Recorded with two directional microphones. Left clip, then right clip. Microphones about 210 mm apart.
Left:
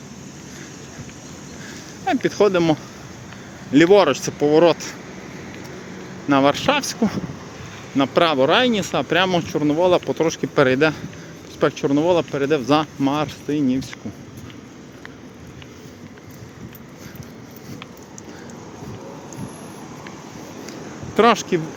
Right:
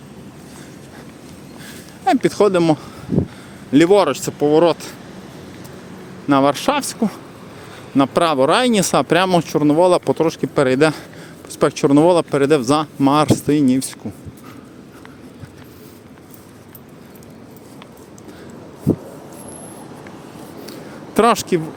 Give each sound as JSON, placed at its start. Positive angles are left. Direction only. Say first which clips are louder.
{"t": 2.0, "sound": "speech", "louder": "right 3 dB", "side_deg": -25}
{"t": 6.2, "sound": "speech", "louder": "right 2 dB", "side_deg": -20}
{"t": 7.9, "sound": "speech", "louder": "right 2 dB", "side_deg": -25}
{"t": 10.2, "sound": "speech", "louder": "right 1 dB", "side_deg": -15}
{"t": 21.2, "sound": "speech", "louder": "right 1 dB", "side_deg": -25}